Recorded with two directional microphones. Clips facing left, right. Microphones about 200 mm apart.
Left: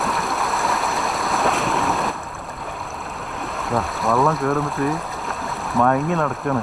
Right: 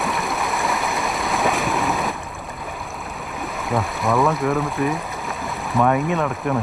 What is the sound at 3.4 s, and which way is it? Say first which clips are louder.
Speech: even; centre (ahead or behind).